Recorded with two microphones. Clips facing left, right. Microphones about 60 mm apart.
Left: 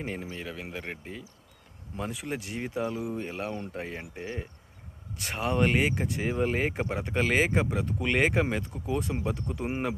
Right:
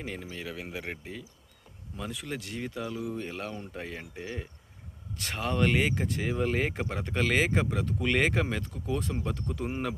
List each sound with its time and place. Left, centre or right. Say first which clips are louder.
0.0 s speech: left 3 dB; left
0.3 s speech: even; centre
2.0 s speech: left 3 dB; left
3.2 s speech: left 3 dB; centre